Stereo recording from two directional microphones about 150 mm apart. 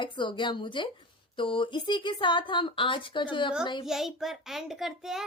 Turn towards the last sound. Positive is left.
turn(degrees=-5)  # may be behind; listen again after turning